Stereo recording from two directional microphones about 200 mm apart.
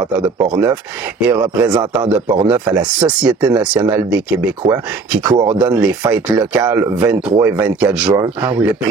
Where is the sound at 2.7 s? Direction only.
5° right (ahead or behind).